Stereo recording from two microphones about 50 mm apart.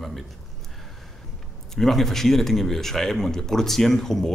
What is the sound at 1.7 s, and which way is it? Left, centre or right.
Speech, centre.